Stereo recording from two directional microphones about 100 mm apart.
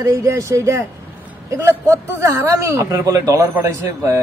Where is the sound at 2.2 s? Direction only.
30° right (ahead or behind).